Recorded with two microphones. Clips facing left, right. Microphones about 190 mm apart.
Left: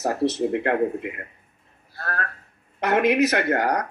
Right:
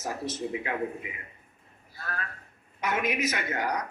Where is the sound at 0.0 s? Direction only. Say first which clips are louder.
Left 10 dB; 65° left (ahead or behind).